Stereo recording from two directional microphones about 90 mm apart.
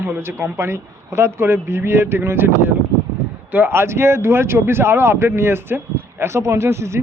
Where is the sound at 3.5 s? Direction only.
20° right (ahead or behind).